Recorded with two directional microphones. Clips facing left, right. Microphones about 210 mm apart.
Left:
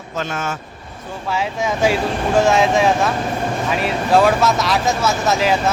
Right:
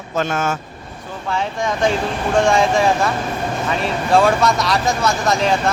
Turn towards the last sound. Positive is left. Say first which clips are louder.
# even
turn(degrees=5)  # may be behind; listen again after turning